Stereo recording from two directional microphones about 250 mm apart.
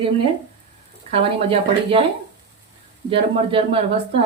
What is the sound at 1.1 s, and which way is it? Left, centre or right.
Speech, right.